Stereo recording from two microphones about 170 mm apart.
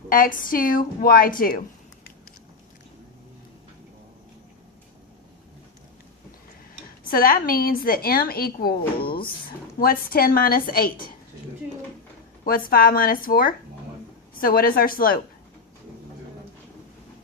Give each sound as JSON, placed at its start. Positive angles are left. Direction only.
{"t": 0.1, "sound": "a woman's voice", "side_deg": 55}
{"t": 7.0, "sound": "a woman's voice", "side_deg": 60}
{"t": 12.5, "sound": "a woman's voice", "side_deg": 60}